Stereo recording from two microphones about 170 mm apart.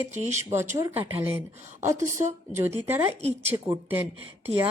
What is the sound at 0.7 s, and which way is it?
Speech, 15° right (ahead or behind).